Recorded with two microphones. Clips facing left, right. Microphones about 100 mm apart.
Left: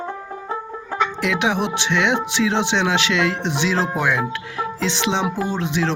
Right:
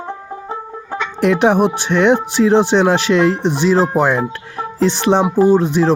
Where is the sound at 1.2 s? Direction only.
50° right (ahead or behind).